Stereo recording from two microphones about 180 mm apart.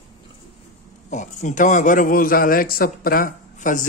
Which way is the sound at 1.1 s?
40° left (ahead or behind).